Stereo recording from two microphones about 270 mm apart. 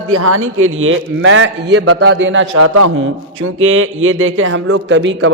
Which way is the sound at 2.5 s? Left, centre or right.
Right.